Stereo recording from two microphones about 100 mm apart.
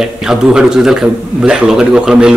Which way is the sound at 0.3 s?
5° right (ahead or behind).